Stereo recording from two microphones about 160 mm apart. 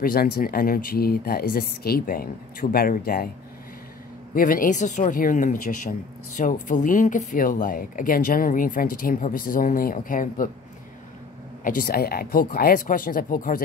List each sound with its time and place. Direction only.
0.0 s speech: 65° left (ahead or behind)
4.3 s speech: 60° left (ahead or behind)
11.6 s speech: 65° left (ahead or behind)